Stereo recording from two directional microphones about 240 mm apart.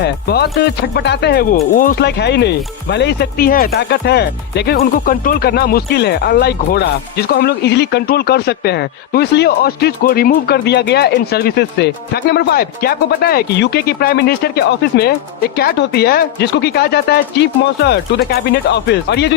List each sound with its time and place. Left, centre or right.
0.0 s speech: left